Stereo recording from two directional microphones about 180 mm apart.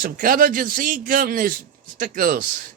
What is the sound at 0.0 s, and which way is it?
Speech, 50° right (ahead or behind).